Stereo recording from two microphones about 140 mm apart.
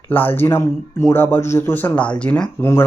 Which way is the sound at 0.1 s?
15° left (ahead or behind).